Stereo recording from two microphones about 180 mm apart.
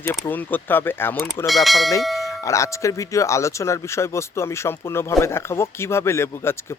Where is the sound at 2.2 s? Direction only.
15° left (ahead or behind).